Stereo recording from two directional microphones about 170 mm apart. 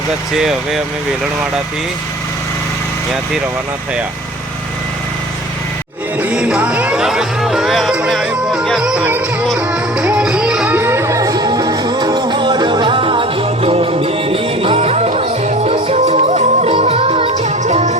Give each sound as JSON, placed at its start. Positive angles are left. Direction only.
{"t": 0.3, "sound": "speech", "side_deg": 0}
{"t": 6.1, "sound": "music", "side_deg": -10}